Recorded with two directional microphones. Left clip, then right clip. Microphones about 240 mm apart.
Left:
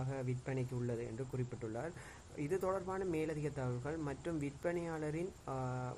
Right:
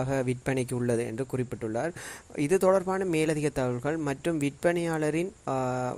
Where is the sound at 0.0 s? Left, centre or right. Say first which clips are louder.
Right 14 dB; right.